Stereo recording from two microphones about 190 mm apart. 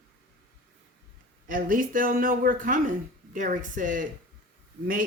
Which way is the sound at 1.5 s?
45° right (ahead or behind).